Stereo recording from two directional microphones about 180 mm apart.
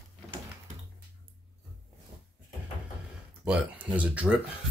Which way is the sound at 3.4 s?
5° right (ahead or behind).